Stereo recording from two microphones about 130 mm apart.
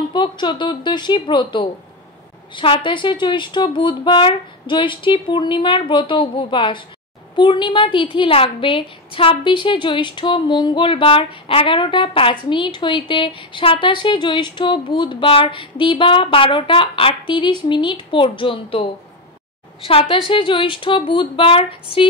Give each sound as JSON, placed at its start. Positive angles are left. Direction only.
{"t": 0.1, "sound": "a woman's voice", "side_deg": 35}